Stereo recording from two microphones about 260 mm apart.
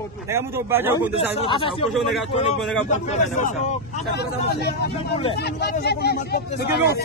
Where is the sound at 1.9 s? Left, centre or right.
Centre.